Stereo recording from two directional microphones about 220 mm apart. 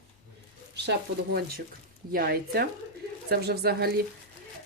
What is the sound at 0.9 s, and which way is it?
Speech, 45° right (ahead or behind).